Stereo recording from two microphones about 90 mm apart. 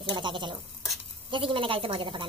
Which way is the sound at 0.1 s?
60° right (ahead or behind).